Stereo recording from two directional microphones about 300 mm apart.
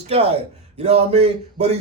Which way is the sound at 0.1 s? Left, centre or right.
Centre.